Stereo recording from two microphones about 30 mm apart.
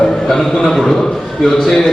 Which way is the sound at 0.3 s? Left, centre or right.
Centre.